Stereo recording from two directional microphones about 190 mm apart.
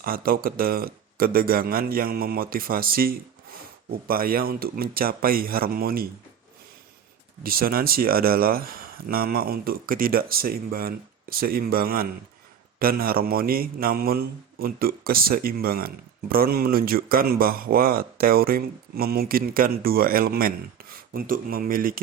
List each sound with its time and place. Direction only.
0.0 s speech: 50° right (ahead or behind)
7.4 s speech: 50° right (ahead or behind)